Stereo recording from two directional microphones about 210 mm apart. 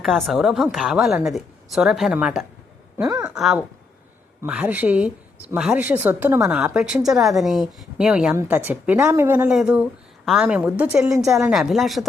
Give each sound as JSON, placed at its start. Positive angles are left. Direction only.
{"t": 0.0, "sound": "a woman's voice", "side_deg": 0}